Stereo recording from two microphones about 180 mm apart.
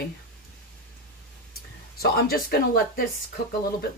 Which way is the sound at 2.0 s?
60° left (ahead or behind).